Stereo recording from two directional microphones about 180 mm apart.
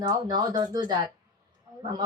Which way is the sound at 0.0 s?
20° right (ahead or behind).